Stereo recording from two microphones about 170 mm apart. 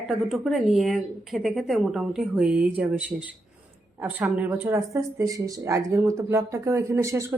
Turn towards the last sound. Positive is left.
turn(degrees=-15)  # may be behind; listen again after turning